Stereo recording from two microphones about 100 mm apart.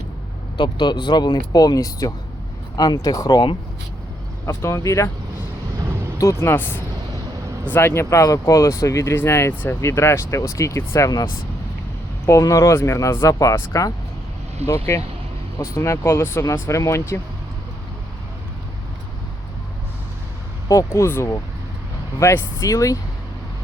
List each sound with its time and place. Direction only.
0.5 s speech: 50° left (ahead or behind)
4.4 s speech: 25° left (ahead or behind)
6.1 s speech: 30° left (ahead or behind)
14.6 s speech: 90° right
15.5 s speech: 35° left (ahead or behind)
20.7 s speech: 30° left (ahead or behind)